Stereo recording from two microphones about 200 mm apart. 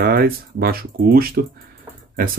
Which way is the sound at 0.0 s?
50° right (ahead or behind).